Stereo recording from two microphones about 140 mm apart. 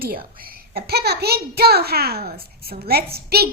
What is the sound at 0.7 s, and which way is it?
A child's voice, 90° right.